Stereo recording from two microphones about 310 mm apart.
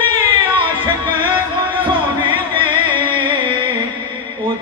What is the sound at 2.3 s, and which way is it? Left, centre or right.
Music, centre.